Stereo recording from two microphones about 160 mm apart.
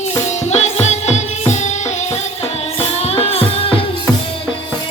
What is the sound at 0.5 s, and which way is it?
Music, 45° left (ahead or behind).